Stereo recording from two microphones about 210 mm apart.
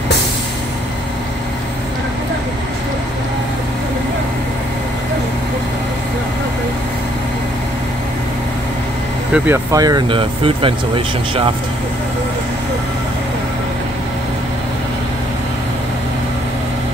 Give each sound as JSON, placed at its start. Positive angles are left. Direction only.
{"t": 9.3, "sound": "speech", "side_deg": -10}